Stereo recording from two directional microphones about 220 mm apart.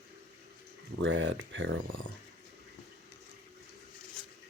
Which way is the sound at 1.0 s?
60° right (ahead or behind).